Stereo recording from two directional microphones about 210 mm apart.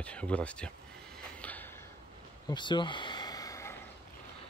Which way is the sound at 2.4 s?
20° left (ahead or behind).